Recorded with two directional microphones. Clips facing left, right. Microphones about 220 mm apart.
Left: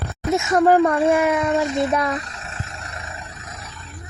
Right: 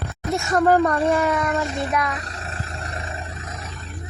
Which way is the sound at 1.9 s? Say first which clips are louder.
Left 3 dB; 30° left (ahead or behind).